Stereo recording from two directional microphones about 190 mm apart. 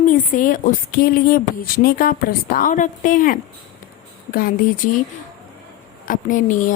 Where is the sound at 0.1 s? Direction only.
45° left (ahead or behind).